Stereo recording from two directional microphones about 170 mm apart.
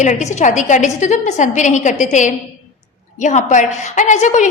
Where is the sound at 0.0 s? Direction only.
45° left (ahead or behind).